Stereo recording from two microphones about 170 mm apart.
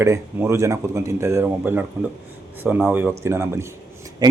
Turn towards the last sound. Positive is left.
turn(degrees=-15)  # may be behind; listen again after turning